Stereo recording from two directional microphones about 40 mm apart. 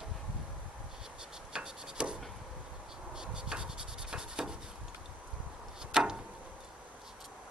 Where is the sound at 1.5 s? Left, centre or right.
Centre.